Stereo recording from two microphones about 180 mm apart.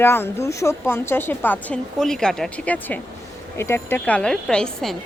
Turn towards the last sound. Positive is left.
turn(degrees=5)  # may be behind; listen again after turning